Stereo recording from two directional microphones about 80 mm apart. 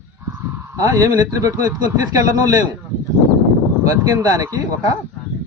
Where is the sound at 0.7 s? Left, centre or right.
Right.